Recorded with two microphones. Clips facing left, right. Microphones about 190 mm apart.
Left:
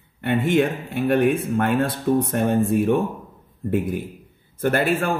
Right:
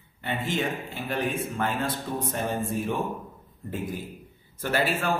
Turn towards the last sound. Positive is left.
turn(degrees=55)  # may be behind; listen again after turning